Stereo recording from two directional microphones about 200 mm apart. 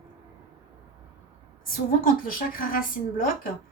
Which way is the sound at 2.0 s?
45° left (ahead or behind).